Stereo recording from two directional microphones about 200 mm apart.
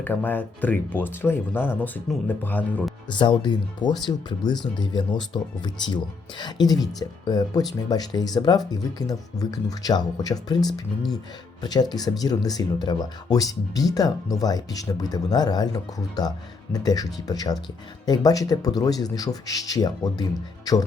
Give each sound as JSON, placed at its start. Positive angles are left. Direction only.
{"t": 0.0, "sound": "speech", "side_deg": 10}
{"t": 3.1, "sound": "speech", "side_deg": 25}